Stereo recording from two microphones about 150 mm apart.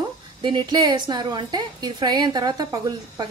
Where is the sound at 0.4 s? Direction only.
30° right (ahead or behind).